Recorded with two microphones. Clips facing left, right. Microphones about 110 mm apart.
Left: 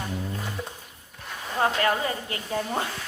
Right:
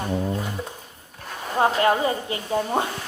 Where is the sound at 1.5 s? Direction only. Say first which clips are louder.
Right 4 dB; 25° right (ahead or behind).